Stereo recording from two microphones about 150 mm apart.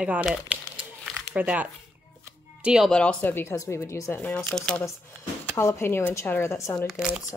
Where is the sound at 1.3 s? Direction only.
10° right (ahead or behind); by 4.8 s 5° left (ahead or behind).